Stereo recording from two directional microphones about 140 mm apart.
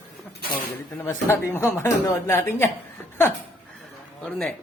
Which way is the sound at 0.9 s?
15° left (ahead or behind).